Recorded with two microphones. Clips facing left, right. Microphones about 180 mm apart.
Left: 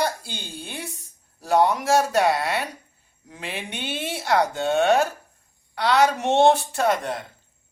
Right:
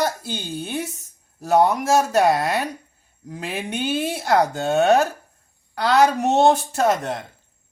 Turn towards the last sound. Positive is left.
turn(degrees=-45)  # may be behind; listen again after turning